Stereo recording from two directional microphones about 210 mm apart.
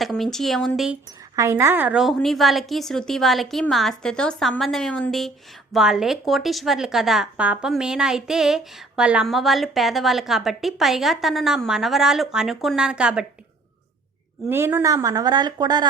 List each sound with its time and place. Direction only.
0.0 s speech: centre (ahead or behind)
1.4 s speech: 10° right (ahead or behind)
14.4 s speech: 10° right (ahead or behind)